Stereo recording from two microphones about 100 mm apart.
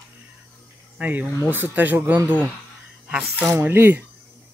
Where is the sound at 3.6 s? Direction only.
20° right (ahead or behind).